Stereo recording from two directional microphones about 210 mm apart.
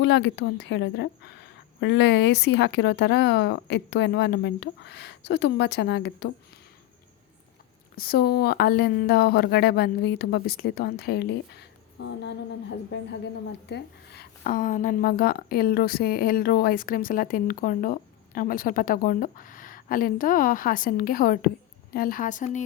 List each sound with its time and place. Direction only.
0.0 s a woman's voice: 55° left (ahead or behind)
7.9 s a woman's voice: 45° left (ahead or behind)